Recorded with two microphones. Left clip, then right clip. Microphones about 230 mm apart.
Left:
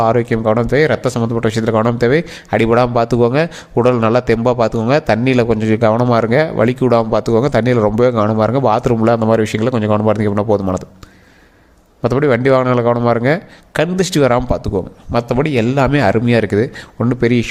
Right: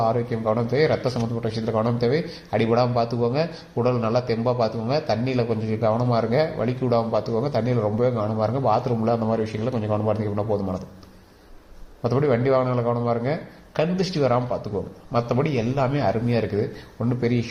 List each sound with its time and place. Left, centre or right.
0.0 s speech: left
12.0 s speech: left